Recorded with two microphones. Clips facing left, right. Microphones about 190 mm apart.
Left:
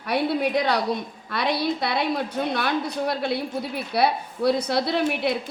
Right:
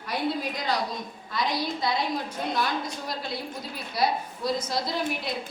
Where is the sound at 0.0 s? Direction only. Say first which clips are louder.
Left 6 dB; 65° left (ahead or behind).